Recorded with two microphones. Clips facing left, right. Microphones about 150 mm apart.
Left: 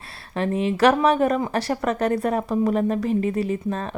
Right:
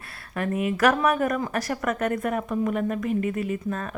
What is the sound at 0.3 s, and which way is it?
A woman's voice, 25° left (ahead or behind).